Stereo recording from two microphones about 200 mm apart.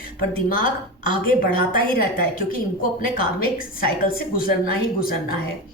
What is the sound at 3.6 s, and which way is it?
A woman's voice, 45° left (ahead or behind).